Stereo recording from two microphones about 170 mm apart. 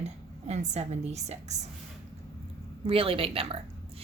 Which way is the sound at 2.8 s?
30° right (ahead or behind).